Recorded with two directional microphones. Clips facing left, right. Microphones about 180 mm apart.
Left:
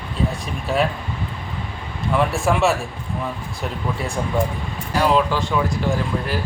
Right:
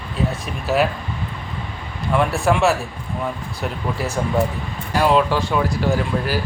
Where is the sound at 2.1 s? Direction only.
Centre (ahead or behind).